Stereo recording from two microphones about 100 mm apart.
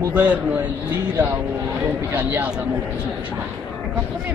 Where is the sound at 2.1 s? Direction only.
15° right (ahead or behind).